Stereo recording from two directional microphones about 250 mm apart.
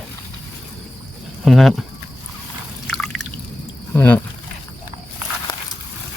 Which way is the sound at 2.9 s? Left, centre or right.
Centre.